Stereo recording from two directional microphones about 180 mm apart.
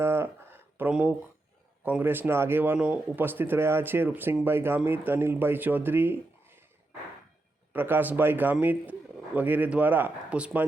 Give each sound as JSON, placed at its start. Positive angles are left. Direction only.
{"t": 0.0, "sound": "a sound", "side_deg": -15}
{"t": 1.8, "sound": "speech", "side_deg": -10}
{"t": 7.7, "sound": "speech", "side_deg": -10}